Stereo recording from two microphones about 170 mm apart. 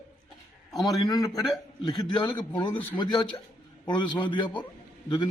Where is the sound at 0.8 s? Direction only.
20° left (ahead or behind).